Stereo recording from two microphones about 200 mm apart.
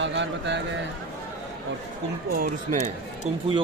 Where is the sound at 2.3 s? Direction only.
45° right (ahead or behind).